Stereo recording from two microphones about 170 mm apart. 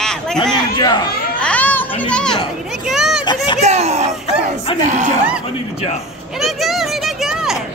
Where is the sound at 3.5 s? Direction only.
40° right (ahead or behind).